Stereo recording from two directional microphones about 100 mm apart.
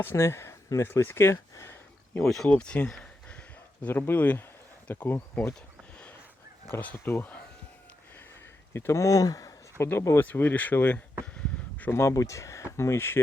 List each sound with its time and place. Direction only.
0.0 s speech: 25° left (ahead or behind)
2.2 s speech: 5° left (ahead or behind); by 5.5 s 20° left (ahead or behind)
6.7 s speech: 20° left (ahead or behind)
8.7 s speech: 30° left (ahead or behind)
9.7 s speech: 25° left (ahead or behind)